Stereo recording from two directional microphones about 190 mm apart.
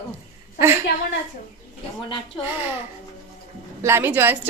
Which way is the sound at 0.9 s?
55° left (ahead or behind).